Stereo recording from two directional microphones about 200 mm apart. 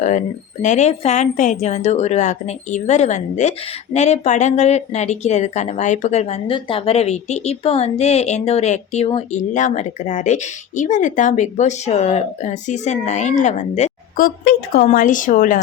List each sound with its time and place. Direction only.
0.6 s a woman's voice: 35° left (ahead or behind)
14.4 s a woman's voice: 45° left (ahead or behind)